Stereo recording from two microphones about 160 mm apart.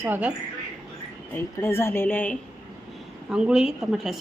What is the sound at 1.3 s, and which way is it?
Speech, 15° left (ahead or behind).